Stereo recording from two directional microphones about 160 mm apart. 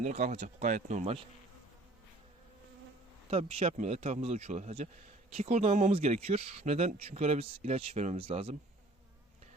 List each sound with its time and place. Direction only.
0.0 s speech: 45° right (ahead or behind)
3.2 s speech: 40° right (ahead or behind)